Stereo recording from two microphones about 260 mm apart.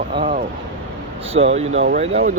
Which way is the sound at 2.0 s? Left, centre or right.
Right.